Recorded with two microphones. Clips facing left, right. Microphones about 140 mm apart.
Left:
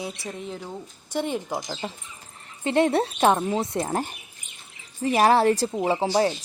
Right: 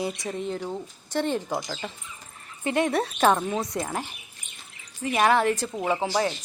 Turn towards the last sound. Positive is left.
turn(degrees=30)  # may be behind; listen again after turning